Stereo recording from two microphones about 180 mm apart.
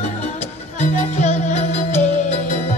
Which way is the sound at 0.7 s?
40° left (ahead or behind).